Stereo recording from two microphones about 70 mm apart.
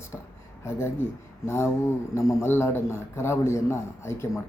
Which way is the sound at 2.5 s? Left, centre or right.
Left.